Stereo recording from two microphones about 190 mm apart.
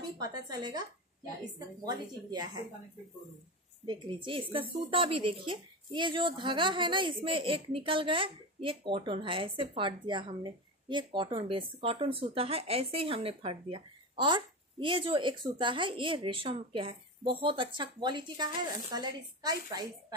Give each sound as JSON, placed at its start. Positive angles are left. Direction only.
{"t": 0.3, "sound": "a woman's voice", "side_deg": -20}
{"t": 1.9, "sound": "a woman's voice", "side_deg": -20}
{"t": 3.8, "sound": "a woman's voice", "side_deg": -25}